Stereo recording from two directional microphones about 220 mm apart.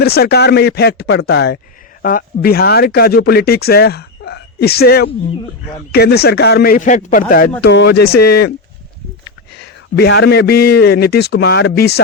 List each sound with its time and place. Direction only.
0.0 s speech: 45° left (ahead or behind)
7.6 s speech: 50° left (ahead or behind)